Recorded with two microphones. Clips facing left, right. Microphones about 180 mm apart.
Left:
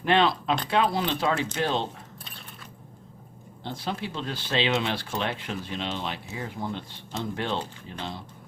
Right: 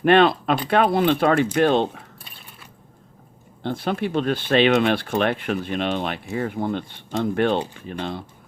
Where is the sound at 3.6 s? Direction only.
60° right (ahead or behind).